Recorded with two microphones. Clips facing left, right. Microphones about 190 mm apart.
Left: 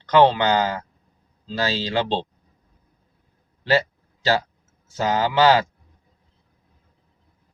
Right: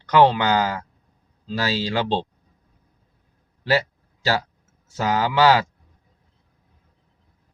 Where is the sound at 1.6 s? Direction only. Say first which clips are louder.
Right 1 dB; 10° right (ahead or behind).